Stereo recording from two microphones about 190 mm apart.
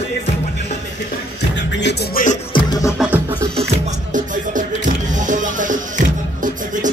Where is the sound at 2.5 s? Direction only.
20° left (ahead or behind).